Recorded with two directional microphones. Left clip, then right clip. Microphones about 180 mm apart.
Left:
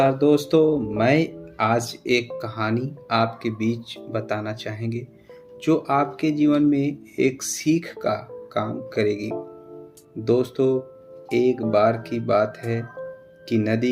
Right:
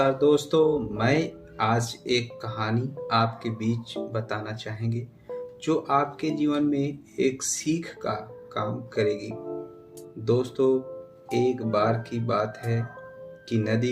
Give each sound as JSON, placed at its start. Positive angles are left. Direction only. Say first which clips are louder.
{"t": 0.0, "sound": "speech", "louder": "left 3 dB", "side_deg": 45}